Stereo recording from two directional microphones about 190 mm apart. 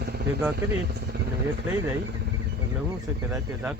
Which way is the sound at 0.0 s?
55° right (ahead or behind).